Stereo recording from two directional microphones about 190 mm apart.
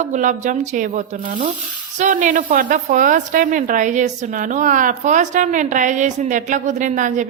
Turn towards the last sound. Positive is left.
turn(degrees=-40)  # may be behind; listen again after turning